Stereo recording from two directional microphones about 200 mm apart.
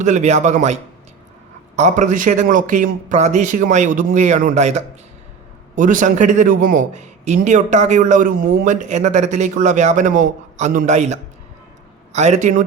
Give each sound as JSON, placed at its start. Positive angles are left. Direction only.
{"t": 0.0, "sound": "a man's voice", "side_deg": -35}